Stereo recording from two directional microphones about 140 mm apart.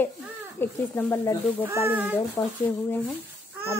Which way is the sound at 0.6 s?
15° left (ahead or behind).